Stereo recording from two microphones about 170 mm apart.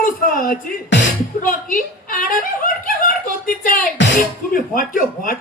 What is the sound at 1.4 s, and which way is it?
Chuckle, 55° left (ahead or behind).